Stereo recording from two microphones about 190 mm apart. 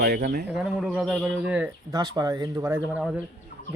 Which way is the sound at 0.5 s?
Centre (ahead or behind).